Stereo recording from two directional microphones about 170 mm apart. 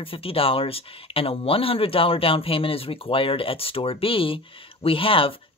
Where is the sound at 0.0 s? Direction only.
35° left (ahead or behind).